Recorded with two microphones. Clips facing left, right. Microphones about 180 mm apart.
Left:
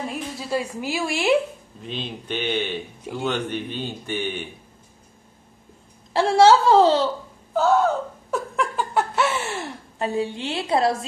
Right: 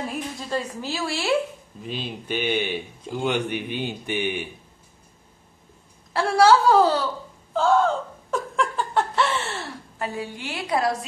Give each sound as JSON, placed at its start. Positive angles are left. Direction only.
{"t": 0.1, "sound": "a woman's voice", "side_deg": 5}
{"t": 1.8, "sound": "speech", "side_deg": -5}
{"t": 6.1, "sound": "a woman's voice", "side_deg": 25}
{"t": 7.5, "sound": "laughter", "side_deg": 5}
{"t": 9.9, "sound": "a woman's voice", "side_deg": 25}